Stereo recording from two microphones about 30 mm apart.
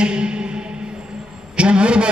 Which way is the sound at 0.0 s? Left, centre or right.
Right.